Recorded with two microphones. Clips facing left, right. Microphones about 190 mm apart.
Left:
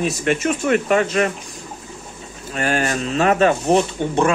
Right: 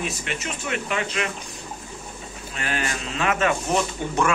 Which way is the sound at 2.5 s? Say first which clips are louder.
Left 8 dB; 45° left (ahead or behind).